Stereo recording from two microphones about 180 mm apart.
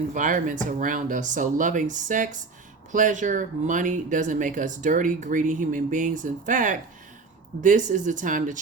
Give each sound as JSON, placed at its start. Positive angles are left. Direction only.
{"t": 0.1, "sound": "speech", "side_deg": -45}